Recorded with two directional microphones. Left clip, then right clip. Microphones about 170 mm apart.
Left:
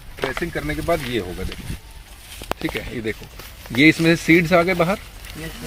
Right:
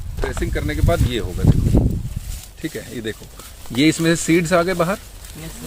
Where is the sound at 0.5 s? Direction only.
5° right (ahead or behind).